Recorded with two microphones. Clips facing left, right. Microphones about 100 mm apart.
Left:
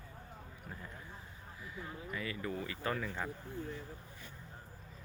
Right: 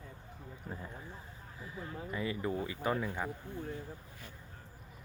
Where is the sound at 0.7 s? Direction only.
30° right (ahead or behind); by 3.3 s 15° right (ahead or behind).